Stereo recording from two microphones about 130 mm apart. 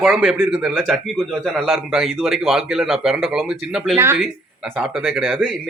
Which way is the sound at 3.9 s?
20° right (ahead or behind).